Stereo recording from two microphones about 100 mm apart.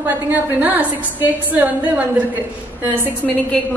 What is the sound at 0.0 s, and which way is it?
A woman's voice, 20° right (ahead or behind).